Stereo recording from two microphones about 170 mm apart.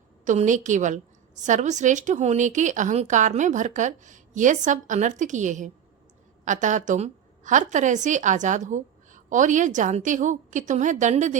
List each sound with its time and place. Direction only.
0.3 s a woman's voice: 45° right (ahead or behind)